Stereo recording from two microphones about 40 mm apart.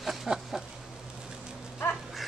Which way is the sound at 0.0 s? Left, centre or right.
Centre.